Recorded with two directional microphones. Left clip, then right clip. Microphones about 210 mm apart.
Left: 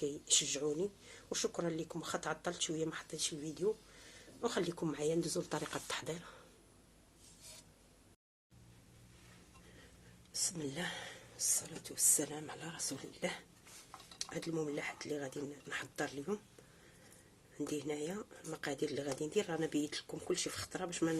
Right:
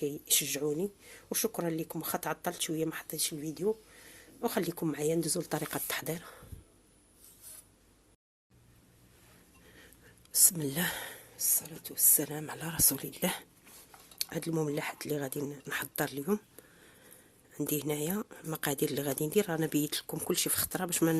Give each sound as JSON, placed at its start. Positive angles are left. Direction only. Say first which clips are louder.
{"t": 0.0, "sound": "speech", "louder": "right 3 dB", "side_deg": -35}
{"t": 10.3, "sound": "speech", "louder": "right 8 dB", "side_deg": -45}
{"t": 11.3, "sound": "speech", "louder": "right 2 dB", "side_deg": -30}
{"t": 17.7, "sound": "speech", "louder": "right 6 dB", "side_deg": -50}